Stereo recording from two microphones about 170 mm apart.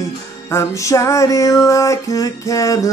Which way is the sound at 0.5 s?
15° left (ahead or behind).